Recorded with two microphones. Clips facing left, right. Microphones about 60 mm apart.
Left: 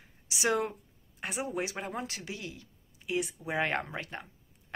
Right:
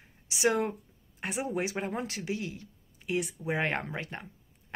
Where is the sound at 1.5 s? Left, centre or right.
Right.